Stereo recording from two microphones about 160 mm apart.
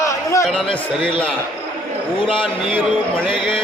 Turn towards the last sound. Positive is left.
turn(degrees=30)  # may be behind; listen again after turning